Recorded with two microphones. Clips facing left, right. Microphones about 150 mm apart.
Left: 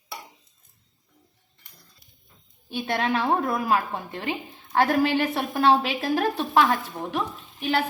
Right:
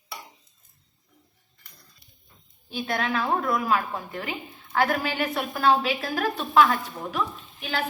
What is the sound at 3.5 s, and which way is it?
A woman's voice, 25° left (ahead or behind).